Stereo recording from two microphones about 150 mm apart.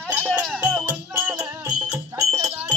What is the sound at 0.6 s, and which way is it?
Music, 10° right (ahead or behind).